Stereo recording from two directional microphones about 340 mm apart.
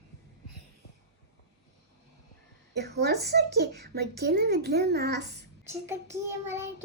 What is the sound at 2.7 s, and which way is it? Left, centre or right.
A child's voice, right.